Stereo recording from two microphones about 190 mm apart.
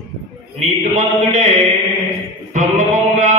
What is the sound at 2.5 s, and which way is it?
Music, 40° right (ahead or behind).